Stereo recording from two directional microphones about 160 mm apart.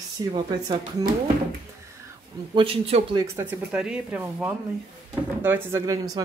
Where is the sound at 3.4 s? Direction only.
10° right (ahead or behind).